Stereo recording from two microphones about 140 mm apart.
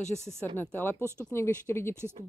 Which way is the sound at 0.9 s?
20° right (ahead or behind).